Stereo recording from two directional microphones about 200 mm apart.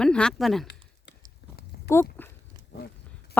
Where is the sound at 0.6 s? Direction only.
60° left (ahead or behind).